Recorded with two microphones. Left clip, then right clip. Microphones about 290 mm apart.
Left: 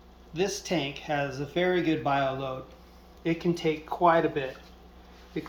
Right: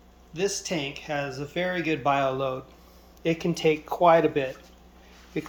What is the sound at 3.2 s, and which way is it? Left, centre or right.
Speech, right.